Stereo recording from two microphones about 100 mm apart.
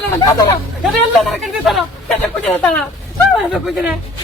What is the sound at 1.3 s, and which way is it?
Speech, centre (ahead or behind).